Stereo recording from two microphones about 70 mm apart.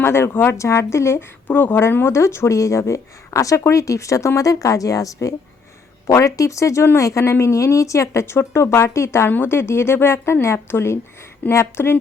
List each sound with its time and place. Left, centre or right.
0.0 s a woman's voice: left
1.5 s a woman's voice: left
9.3 s speech: left